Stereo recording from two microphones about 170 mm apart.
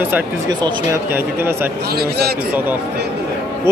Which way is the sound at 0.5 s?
25° right (ahead or behind).